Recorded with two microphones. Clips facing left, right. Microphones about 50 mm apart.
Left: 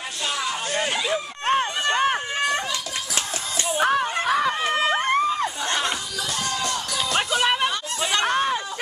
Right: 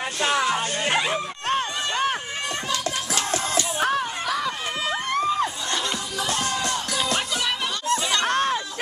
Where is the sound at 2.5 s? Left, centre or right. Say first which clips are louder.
Right 1 dB; left.